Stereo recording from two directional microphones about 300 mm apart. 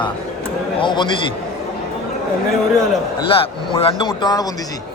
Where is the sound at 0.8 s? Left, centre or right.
Centre.